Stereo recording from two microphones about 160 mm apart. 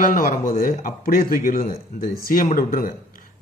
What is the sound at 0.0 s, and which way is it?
A man's voice, 60° left (ahead or behind).